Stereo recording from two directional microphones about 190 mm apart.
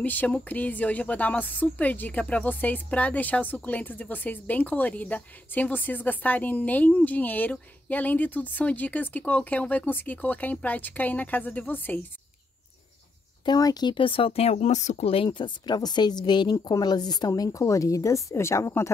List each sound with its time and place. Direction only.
0.0 s a woman's voice: 10° left (ahead or behind)
13.5 s speech: 20° left (ahead or behind)